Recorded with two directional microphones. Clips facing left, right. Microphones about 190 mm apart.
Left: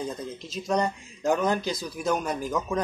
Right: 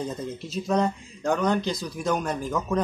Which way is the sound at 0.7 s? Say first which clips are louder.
Right 2 dB; centre (ahead or behind).